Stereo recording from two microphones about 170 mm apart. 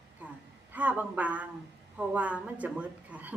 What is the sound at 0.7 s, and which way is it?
A woman's voice, 10° right (ahead or behind).